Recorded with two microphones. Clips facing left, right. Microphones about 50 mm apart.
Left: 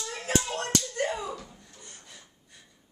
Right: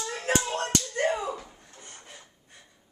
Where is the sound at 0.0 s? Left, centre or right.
Right.